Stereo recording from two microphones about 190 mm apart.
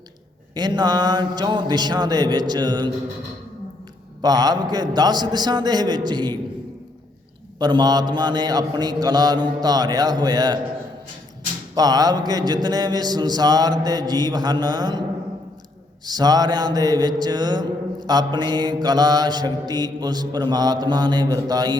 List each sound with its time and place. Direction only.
0.5 s mantra: 20° right (ahead or behind)
4.2 s mantra: 20° right (ahead or behind)
7.6 s mantra: 20° right (ahead or behind)
11.7 s mantra: 20° right (ahead or behind)
16.0 s mantra: 20° right (ahead or behind)